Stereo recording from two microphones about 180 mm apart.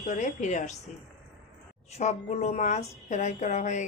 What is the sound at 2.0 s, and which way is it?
A woman's voice, 35° left (ahead or behind).